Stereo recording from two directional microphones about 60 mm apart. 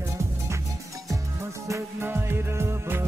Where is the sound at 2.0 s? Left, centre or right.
Right.